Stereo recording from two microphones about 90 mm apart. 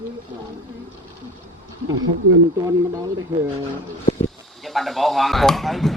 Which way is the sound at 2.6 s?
40° right (ahead or behind).